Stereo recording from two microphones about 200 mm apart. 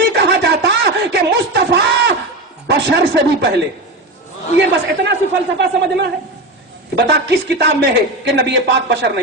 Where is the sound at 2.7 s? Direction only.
60° right (ahead or behind).